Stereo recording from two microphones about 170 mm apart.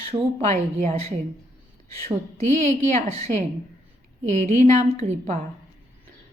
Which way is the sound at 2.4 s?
15° left (ahead or behind).